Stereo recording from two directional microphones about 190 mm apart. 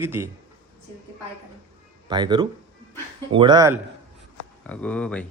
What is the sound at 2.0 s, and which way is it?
Speech, 25° right (ahead or behind).